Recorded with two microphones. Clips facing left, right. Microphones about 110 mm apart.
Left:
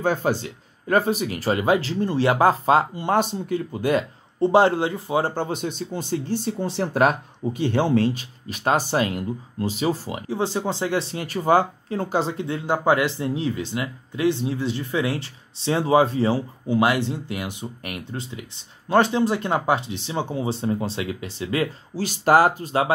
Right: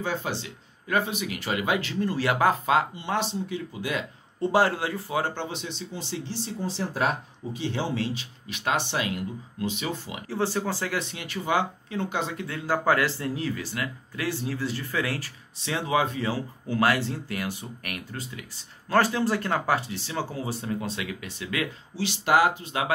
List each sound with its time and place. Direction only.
0.0 s speech: 45° left (ahead or behind)
3.0 s speech: 50° left (ahead or behind)
4.4 s speech: 25° left (ahead or behind)
5.2 s speech: 40° left (ahead or behind)
10.2 s speech: 20° left (ahead or behind)
16.6 s speech: 20° left (ahead or behind)
21.9 s speech: 45° left (ahead or behind)